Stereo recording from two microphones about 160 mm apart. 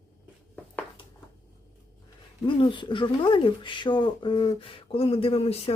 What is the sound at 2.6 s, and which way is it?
Speech, 30° left (ahead or behind).